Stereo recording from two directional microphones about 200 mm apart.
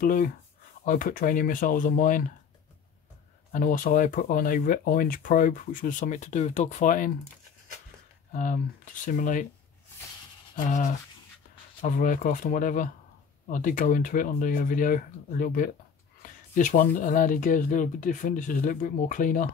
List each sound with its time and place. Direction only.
0.0 s speech: 45° left (ahead or behind)
3.5 s speech: 45° left (ahead or behind)
8.3 s speech: 40° left (ahead or behind)
10.5 s speech: 40° left (ahead or behind)